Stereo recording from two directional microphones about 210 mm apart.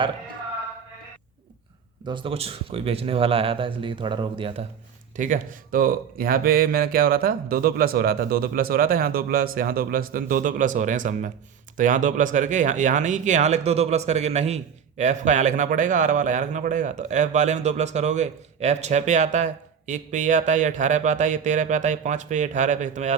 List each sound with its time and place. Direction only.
2.0 s speech: 25° right (ahead or behind)
5.1 s speech: 35° right (ahead or behind)